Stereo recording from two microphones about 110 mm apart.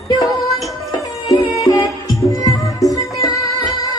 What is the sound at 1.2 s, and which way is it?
Music, 30° left (ahead or behind).